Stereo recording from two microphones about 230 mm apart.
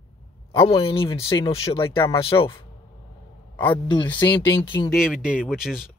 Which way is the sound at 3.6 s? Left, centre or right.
Left.